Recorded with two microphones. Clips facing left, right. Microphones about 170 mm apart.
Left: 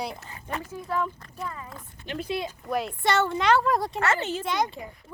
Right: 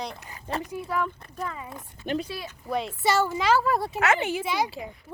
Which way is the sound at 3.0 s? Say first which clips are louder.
Even; 5° right (ahead or behind).